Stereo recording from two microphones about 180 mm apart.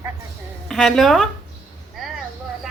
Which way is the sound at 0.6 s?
Centre (ahead or behind).